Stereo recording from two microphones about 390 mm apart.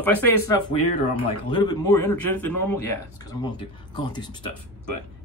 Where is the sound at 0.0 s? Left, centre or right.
Centre.